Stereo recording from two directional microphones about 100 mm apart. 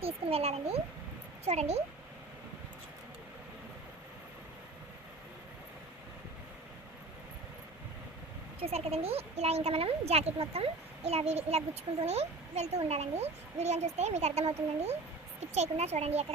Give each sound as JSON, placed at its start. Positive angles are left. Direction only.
{"t": 0.0, "sound": "speech", "side_deg": -85}
{"t": 8.6, "sound": "speech", "side_deg": -90}